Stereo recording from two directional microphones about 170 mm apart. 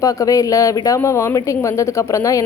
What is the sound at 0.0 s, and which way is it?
Speech, 20° left (ahead or behind).